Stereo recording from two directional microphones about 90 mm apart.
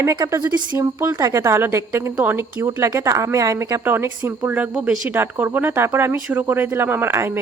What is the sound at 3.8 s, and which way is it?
Speech, 25° right (ahead or behind).